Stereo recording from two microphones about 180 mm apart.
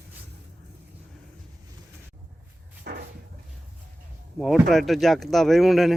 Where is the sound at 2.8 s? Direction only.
65° right (ahead or behind).